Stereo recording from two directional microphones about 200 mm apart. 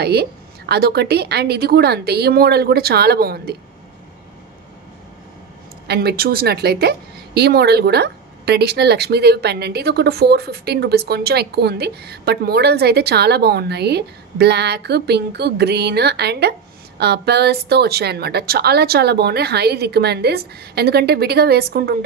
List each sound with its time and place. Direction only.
0.0 s a woman's voice: 55° right (ahead or behind)
5.9 s a woman's voice: 50° right (ahead or behind)